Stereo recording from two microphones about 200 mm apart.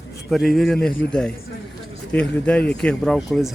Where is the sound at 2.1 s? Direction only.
5° left (ahead or behind).